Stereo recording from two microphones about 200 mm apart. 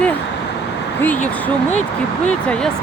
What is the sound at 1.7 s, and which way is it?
Speech, 35° left (ahead or behind).